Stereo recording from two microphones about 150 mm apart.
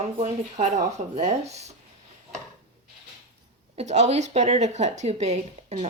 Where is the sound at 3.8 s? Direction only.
50° right (ahead or behind).